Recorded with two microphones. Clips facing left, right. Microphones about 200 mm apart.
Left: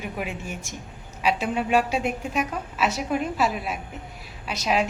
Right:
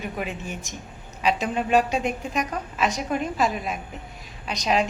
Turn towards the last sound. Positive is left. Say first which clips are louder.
# right 1 dB
turn(degrees=5)  # may be behind; listen again after turning